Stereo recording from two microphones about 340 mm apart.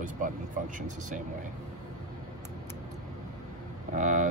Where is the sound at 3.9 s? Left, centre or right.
Right.